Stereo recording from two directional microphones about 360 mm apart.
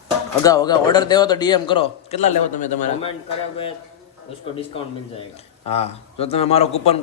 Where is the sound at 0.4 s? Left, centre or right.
Centre.